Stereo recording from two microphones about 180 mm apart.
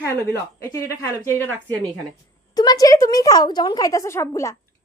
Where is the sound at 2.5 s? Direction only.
20° left (ahead or behind).